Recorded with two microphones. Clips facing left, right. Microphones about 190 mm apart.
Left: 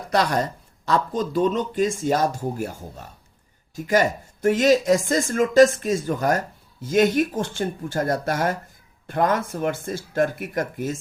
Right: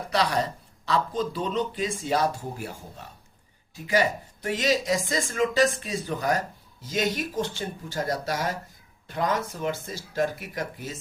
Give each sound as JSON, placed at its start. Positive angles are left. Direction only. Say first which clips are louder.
{"t": 0.1, "sound": "speech", "louder": "left 4 dB", "side_deg": 45}
{"t": 3.8, "sound": "speech", "louder": "left 4 dB", "side_deg": 45}